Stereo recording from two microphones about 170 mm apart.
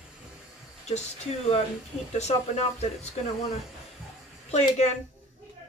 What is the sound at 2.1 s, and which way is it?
Speech, 40° left (ahead or behind).